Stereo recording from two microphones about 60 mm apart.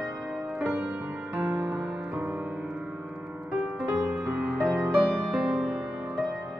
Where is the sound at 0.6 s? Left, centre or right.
Right.